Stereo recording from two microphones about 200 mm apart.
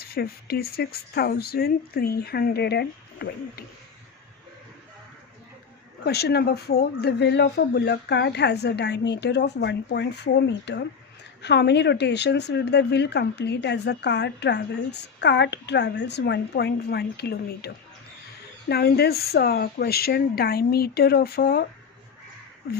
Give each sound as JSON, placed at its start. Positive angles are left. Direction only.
{"t": 0.0, "sound": "speech", "side_deg": 50}
{"t": 6.1, "sound": "a woman's voice", "side_deg": 55}
{"t": 18.7, "sound": "speech", "side_deg": 50}